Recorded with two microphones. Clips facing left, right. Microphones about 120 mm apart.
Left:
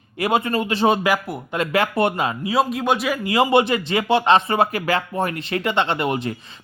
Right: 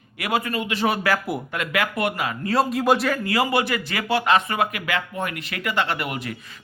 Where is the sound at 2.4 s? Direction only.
5° left (ahead or behind).